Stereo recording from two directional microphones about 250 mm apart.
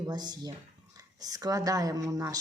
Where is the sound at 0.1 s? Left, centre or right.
Centre.